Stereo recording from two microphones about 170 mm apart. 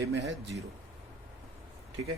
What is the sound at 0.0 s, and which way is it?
Speech, 90° right.